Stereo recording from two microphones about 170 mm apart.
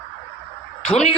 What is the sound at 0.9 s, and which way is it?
Speech, 35° left (ahead or behind).